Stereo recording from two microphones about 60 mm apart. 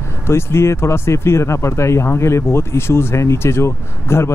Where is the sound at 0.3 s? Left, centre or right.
Left.